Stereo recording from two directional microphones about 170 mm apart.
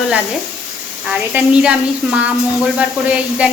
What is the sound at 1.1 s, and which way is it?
A woman's voice, 5° right (ahead or behind).